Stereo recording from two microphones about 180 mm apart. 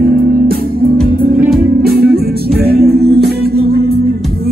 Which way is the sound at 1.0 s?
5° right (ahead or behind).